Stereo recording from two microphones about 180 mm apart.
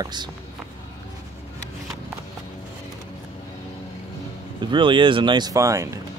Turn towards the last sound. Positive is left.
turn(degrees=-15)  # may be behind; listen again after turning